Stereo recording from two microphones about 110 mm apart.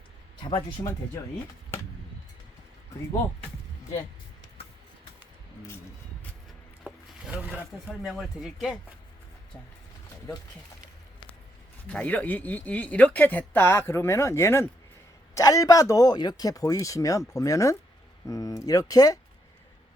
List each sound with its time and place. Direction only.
0.8 s speech: 35° left (ahead or behind)
8.0 s speech: 5° right (ahead or behind)
11.9 s speech: 10° left (ahead or behind); by 19.2 s 35° left (ahead or behind)